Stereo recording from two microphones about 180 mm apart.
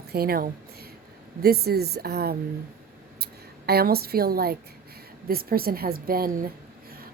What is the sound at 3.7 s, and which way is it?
A woman's voice, 60° right (ahead or behind).